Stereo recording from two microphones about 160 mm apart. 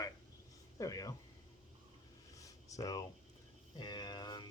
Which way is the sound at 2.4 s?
20° left (ahead or behind).